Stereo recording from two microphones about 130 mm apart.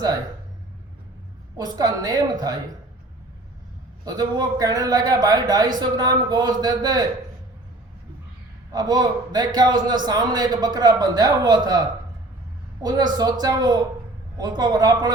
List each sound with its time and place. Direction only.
1.5 s a woman's voice: 30° right (ahead or behind)
4.0 s speech: 30° right (ahead or behind)
8.7 s speech: 30° right (ahead or behind)